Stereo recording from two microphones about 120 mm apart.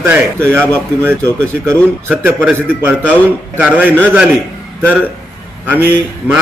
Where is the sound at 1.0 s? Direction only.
20° right (ahead or behind).